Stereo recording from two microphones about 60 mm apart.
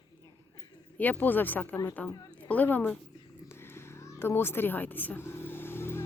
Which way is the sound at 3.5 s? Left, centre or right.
Left.